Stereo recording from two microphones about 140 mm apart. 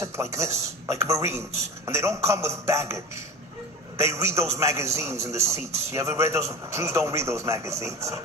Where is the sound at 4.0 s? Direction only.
20° right (ahead or behind).